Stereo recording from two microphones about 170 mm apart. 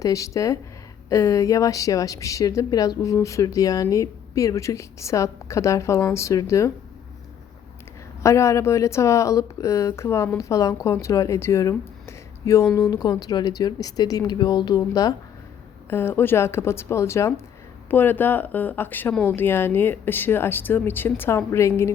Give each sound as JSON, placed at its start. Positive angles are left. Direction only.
{"t": 0.0, "sound": "speech", "side_deg": 20}
{"t": 8.2, "sound": "speech", "side_deg": 15}